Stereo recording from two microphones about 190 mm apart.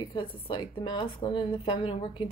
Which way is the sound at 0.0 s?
25° left (ahead or behind).